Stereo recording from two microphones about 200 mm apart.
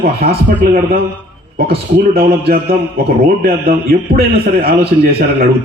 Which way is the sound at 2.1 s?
50° right (ahead or behind).